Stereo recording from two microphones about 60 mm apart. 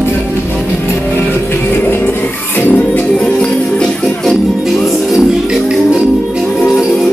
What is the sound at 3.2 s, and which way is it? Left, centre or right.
Music, centre.